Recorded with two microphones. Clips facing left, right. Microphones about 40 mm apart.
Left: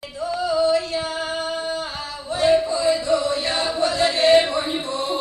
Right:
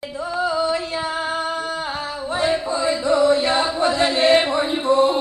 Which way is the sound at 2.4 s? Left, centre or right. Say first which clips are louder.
Left 4 dB; right.